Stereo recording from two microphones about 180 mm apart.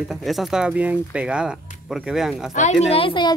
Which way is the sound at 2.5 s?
40° left (ahead or behind).